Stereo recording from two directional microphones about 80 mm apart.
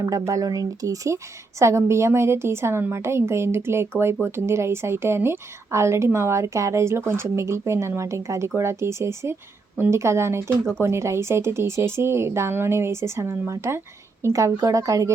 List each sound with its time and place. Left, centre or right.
0.0 s a woman's voice: right